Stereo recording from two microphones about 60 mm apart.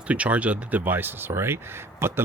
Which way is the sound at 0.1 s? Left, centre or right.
Right.